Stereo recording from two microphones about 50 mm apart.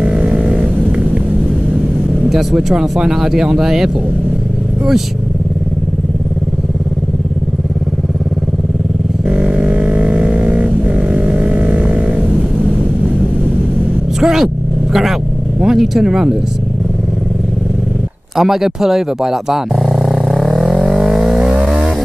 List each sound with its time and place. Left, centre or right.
0.2 s vehicle: centre
2.5 s speech: centre
9.3 s a sound: centre
14.2 s vehicle: centre
15.6 s speech: centre
18.3 s a sound: centre